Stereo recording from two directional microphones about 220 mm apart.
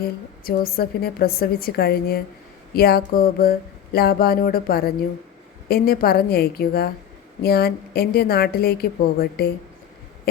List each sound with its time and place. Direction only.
0.4 s a woman's voice: 45° left (ahead or behind)